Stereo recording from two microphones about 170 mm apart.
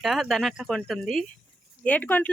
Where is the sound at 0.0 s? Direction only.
Centre (ahead or behind).